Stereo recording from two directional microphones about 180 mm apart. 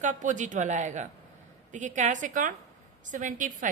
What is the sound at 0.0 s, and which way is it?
A woman's voice, 45° right (ahead or behind).